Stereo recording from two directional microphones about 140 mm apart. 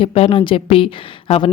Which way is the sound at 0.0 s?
45° left (ahead or behind).